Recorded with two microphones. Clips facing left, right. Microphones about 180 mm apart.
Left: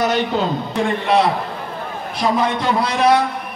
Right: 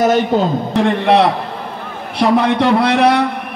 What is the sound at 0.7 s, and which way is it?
A man's voice, 65° right (ahead or behind).